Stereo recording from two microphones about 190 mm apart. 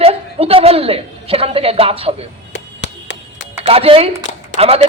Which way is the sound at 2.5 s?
75° left (ahead or behind).